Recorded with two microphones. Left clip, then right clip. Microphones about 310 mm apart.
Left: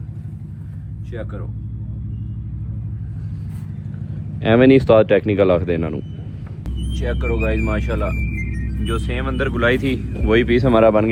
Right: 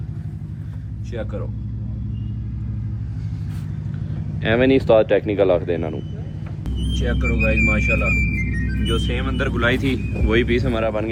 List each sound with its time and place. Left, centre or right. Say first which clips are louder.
1.1 s speech: right 2 dB; centre
4.4 s speech: left 4 dB; centre
6.9 s speech: left 1 dB; centre